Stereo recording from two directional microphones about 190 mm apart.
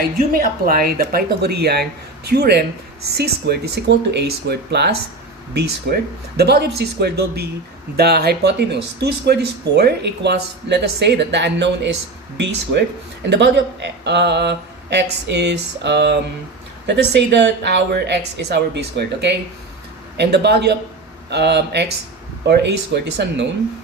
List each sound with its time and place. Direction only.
0.2 s speech: 50° right (ahead or behind)
13.3 s speech: 65° right (ahead or behind)